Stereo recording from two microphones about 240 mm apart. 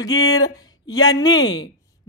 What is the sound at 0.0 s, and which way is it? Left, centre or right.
Speech, centre.